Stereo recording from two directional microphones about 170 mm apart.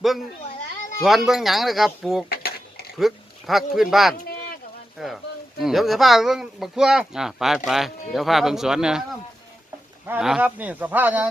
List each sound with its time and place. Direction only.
1.0 s speech: centre (ahead or behind)
2.3 s a sound: 65° left (ahead or behind)
3.0 s speech: centre (ahead or behind)
10.1 s speech: 5° right (ahead or behind)